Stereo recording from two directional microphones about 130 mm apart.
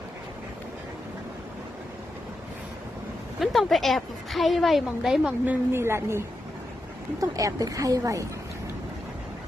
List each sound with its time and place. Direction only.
3.4 s a woman's voice: centre (ahead or behind)
5.5 s speech: 20° right (ahead or behind)